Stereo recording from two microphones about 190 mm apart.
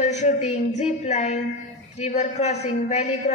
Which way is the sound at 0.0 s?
40° left (ahead or behind).